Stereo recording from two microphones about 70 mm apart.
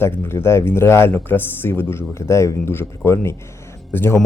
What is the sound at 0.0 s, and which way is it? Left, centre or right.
Speech, left.